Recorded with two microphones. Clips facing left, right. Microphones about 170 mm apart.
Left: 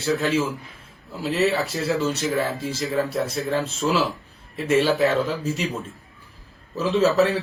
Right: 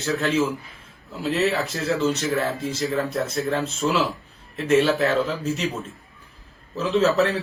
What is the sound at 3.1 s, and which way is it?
A man's voice, centre (ahead or behind).